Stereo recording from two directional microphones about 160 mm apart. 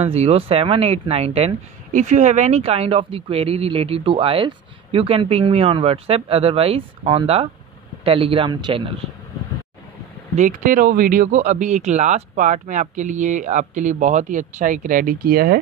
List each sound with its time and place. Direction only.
0.0 s speech: 40° right (ahead or behind)
10.3 s speech: 50° right (ahead or behind); by 15.6 s 70° right (ahead or behind)